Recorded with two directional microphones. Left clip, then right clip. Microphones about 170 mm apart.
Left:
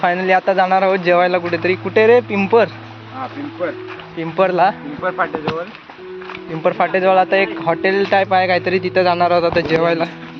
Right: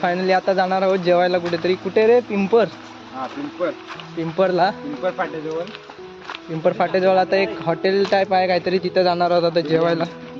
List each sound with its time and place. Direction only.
0.0 s speech: 5° right (ahead or behind)
4.2 s speech: 5° right (ahead or behind)
5.0 s speech: 25° left (ahead or behind)
6.6 s speech: 5° right (ahead or behind)